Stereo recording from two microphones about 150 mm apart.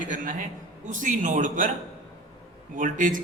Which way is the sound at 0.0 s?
60° right (ahead or behind).